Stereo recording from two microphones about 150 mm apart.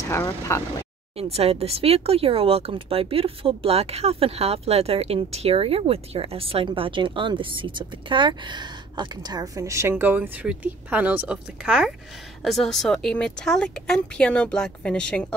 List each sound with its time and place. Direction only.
0.1 s speech: 20° left (ahead or behind)
1.1 s speech: 40° right (ahead or behind); by 15.2 s 5° left (ahead or behind)